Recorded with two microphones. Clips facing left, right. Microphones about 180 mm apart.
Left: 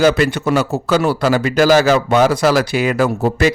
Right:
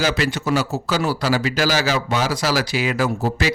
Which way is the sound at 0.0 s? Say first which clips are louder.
Left 8 dB; 55° left (ahead or behind).